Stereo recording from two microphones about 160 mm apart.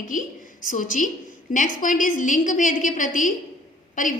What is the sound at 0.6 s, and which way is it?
A woman's voice, 55° left (ahead or behind).